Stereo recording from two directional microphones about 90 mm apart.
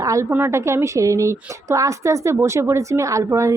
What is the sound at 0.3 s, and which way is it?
A woman's voice, 25° right (ahead or behind).